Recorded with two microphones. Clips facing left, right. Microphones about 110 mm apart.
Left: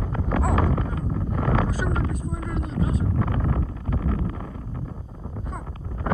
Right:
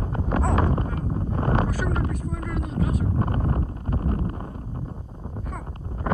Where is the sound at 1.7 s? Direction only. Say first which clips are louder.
Even; 25° left (ahead or behind).